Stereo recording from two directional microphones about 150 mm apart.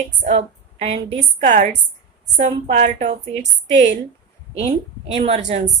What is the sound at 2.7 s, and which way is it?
A woman's voice, 55° right (ahead or behind).